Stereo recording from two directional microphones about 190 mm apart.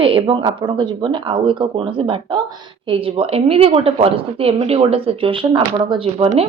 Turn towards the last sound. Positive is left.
turn(degrees=-30)  # may be behind; listen again after turning